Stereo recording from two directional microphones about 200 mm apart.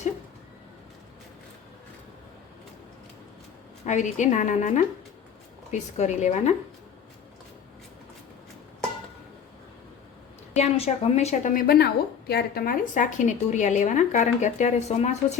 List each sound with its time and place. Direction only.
3.8 s a woman's voice: 35° left (ahead or behind)
10.5 s a woman's voice: 30° left (ahead or behind)